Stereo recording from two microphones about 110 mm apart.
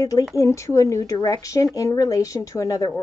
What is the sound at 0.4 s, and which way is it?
Speech, 25° left (ahead or behind).